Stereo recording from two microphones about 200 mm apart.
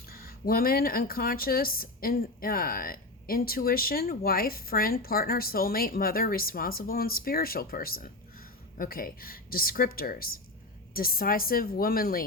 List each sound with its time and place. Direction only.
0.0 s speech: 50° left (ahead or behind)